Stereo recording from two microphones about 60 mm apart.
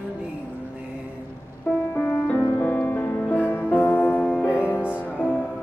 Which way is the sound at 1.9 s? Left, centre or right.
Left.